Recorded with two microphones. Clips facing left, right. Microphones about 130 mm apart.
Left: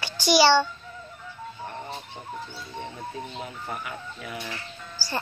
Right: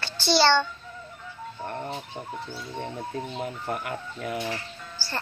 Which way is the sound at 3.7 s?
55° right (ahead or behind).